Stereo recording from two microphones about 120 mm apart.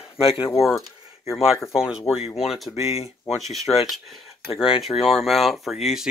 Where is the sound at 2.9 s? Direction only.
60° left (ahead or behind).